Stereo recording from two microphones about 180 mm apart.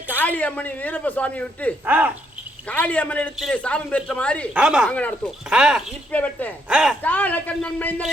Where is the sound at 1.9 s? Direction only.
10° right (ahead or behind).